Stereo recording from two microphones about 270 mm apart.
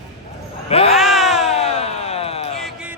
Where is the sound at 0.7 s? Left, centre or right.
Left.